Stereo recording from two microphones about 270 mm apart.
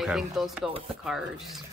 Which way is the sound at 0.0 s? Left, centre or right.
Centre.